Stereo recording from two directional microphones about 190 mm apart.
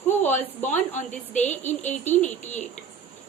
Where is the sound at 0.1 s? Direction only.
10° left (ahead or behind).